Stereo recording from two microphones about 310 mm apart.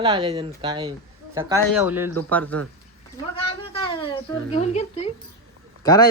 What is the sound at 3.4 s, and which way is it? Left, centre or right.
A woman's voice, centre.